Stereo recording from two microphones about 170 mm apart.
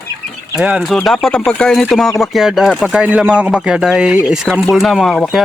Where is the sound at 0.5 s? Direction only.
5° right (ahead or behind).